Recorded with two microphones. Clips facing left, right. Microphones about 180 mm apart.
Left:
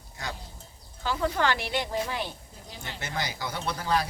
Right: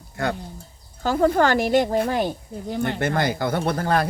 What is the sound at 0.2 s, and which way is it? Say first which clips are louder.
Speech: right 12 dB; 55° right (ahead or behind).